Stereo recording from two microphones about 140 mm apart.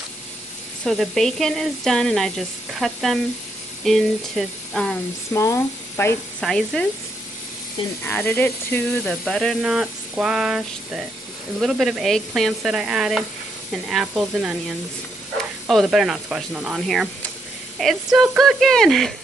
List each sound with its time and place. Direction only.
0.8 s speech: centre (ahead or behind)
5.3 s speech: 20° left (ahead or behind)
6.4 s speech: 5° left (ahead or behind)
8.0 s speech: 10° left (ahead or behind)